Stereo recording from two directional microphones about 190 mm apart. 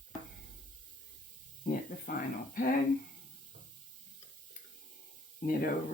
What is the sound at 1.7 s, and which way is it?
Speech, 50° left (ahead or behind).